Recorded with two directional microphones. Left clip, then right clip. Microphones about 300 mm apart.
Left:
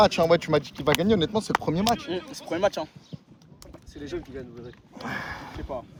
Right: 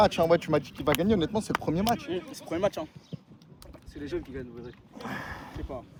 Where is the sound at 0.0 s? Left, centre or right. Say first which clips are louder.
Left 3 dB; left.